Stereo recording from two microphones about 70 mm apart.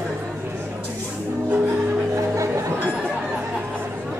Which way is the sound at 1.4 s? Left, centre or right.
Right.